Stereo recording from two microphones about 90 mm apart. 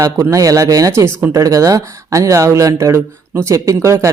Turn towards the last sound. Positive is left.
turn(degrees=-30)  # may be behind; listen again after turning